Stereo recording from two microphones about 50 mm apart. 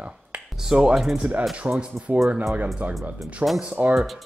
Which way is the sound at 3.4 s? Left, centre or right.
Right.